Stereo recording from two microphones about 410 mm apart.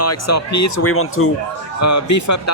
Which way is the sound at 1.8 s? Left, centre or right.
Left.